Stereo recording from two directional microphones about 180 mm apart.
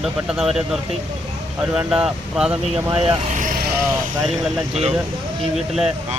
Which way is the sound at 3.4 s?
50° right (ahead or behind).